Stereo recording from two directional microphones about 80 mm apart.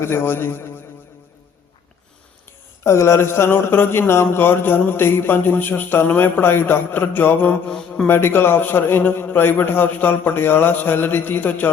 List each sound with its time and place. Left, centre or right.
0.0 s speech: left
2.8 s speech: left